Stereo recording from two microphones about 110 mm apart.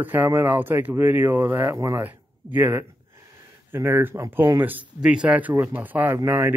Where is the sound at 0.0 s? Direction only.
15° right (ahead or behind).